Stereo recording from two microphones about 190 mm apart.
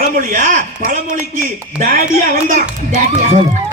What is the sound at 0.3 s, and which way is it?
Speech, 45° right (ahead or behind).